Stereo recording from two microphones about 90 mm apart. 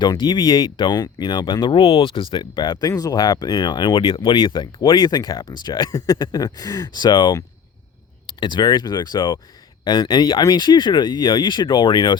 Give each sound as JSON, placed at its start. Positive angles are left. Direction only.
{"t": 0.0, "sound": "speech", "side_deg": 50}
{"t": 1.6, "sound": "speech", "side_deg": 80}
{"t": 8.4, "sound": "speech", "side_deg": 55}